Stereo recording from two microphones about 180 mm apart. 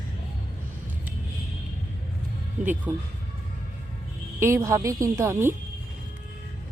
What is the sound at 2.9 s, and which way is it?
Speech, 5° right (ahead or behind).